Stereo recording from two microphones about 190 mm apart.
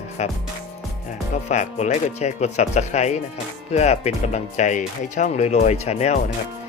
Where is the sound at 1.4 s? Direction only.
35° left (ahead or behind).